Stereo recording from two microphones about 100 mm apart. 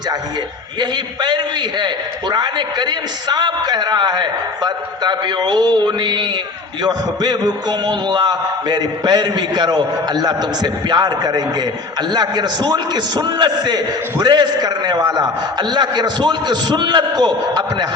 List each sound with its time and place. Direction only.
0.8 s a man's voice: 45° right (ahead or behind)